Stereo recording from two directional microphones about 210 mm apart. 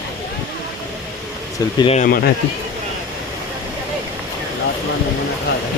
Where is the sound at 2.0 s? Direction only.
45° left (ahead or behind).